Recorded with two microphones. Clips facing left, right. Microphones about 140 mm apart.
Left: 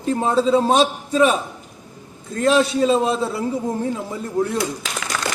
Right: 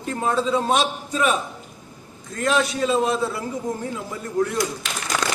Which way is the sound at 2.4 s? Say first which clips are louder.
Left 5 dB; 30° left (ahead or behind).